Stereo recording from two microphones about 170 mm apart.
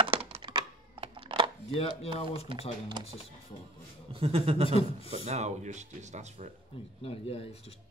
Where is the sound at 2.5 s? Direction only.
30° right (ahead or behind).